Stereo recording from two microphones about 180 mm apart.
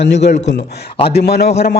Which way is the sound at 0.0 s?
75° left (ahead or behind).